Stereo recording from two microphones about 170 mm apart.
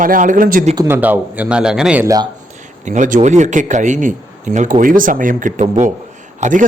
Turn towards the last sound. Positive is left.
turn(degrees=-50)  # may be behind; listen again after turning